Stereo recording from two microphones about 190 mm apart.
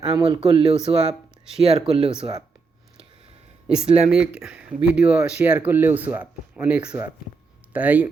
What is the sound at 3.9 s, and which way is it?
Speech, 35° right (ahead or behind).